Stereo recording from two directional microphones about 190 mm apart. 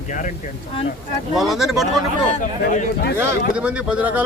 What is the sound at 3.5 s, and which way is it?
Speech, 5° right (ahead or behind).